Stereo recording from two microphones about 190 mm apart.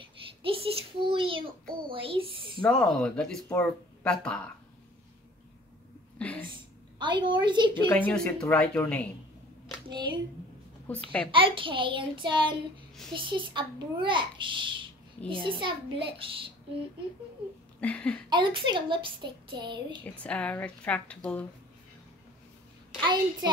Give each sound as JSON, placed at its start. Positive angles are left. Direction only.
{"t": 0.4, "sound": "a sound", "side_deg": -30}
{"t": 1.9, "sound": "a child's voice", "side_deg": -30}
{"t": 2.6, "sound": "speech", "side_deg": 5}
{"t": 6.1, "sound": "a sound", "side_deg": 5}
{"t": 7.0, "sound": "a child's voice", "side_deg": -25}
{"t": 7.9, "sound": "speech", "side_deg": 10}
{"t": 9.8, "sound": "a child's voice", "side_deg": -25}
{"t": 10.9, "sound": "speech", "side_deg": 5}
{"t": 11.3, "sound": "a child's voice", "side_deg": -25}
{"t": 17.7, "sound": "speech", "side_deg": 5}
{"t": 18.3, "sound": "a child's voice", "side_deg": -25}
{"t": 20.0, "sound": "speech", "side_deg": 5}
{"t": 23.0, "sound": "a child's voice", "side_deg": -25}